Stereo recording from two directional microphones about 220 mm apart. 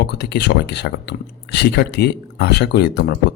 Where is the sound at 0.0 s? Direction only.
50° left (ahead or behind).